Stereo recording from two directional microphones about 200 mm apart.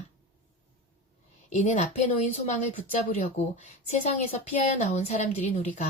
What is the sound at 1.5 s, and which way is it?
A woman's voice, 35° left (ahead or behind).